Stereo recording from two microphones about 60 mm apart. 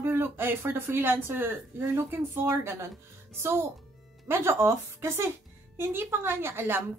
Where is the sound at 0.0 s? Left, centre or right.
Right.